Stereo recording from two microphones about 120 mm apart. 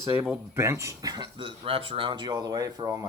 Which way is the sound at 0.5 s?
20° right (ahead or behind).